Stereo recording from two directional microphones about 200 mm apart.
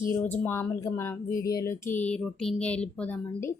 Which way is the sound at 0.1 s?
10° left (ahead or behind).